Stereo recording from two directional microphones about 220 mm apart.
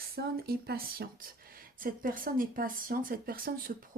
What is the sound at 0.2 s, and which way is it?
Speech, 45° right (ahead or behind).